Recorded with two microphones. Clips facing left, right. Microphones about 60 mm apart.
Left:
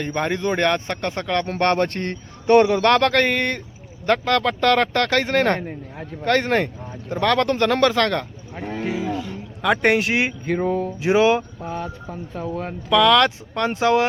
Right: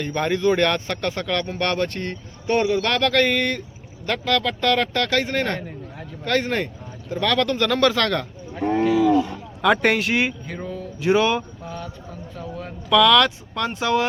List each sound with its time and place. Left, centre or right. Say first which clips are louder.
0.0 s speech: right 2 dB; left
9.6 s speech: even; centre
10.4 s speech: left 10 dB; left
11.0 s speech: left 2 dB; left
11.6 s speech: left 5 dB; left
12.9 s speech: even; left